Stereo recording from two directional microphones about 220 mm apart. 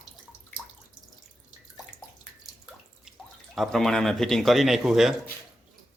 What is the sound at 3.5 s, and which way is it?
Speech, centre (ahead or behind).